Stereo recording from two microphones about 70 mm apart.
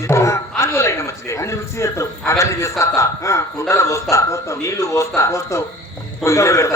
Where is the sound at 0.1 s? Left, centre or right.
Left.